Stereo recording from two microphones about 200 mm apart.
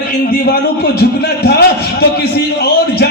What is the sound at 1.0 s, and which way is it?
Speech, 55° left (ahead or behind).